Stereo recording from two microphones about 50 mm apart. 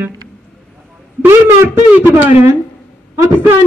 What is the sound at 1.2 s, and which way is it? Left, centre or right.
Speech, right.